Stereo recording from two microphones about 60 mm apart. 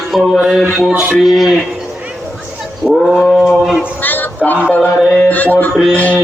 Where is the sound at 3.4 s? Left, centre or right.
Centre.